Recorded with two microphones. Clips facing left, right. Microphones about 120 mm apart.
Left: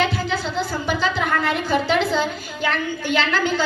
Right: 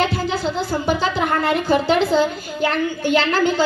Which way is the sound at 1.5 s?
45° right (ahead or behind).